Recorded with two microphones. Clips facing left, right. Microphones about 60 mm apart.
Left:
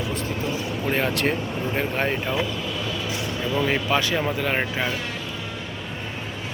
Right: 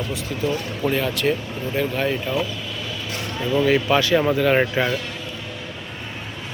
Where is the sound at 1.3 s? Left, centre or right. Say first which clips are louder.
Right 2 dB; left.